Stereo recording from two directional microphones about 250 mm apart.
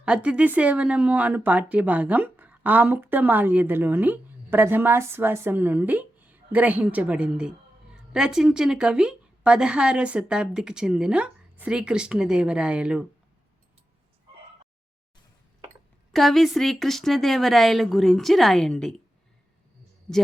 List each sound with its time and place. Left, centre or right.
0.0 s a woman's voice: centre
16.1 s a woman's voice: centre